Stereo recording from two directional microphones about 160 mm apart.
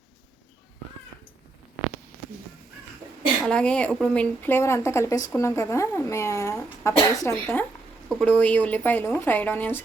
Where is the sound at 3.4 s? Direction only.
5° left (ahead or behind).